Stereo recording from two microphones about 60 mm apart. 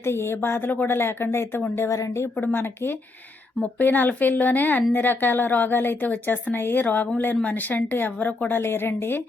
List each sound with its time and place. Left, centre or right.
0.0 s a woman's voice: left
1.9 s a woman's voice: left
2.3 s a woman's voice: left